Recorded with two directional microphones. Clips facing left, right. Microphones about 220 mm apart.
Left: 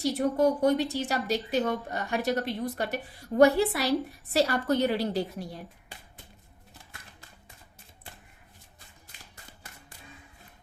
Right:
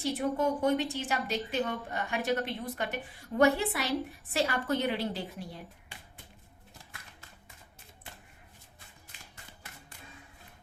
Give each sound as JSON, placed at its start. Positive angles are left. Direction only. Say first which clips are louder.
{"t": 0.0, "sound": "speech", "louder": "left 5 dB", "side_deg": 40}